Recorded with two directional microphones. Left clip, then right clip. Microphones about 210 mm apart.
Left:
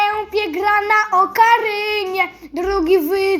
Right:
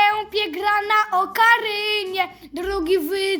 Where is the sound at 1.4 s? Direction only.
65° right (ahead or behind).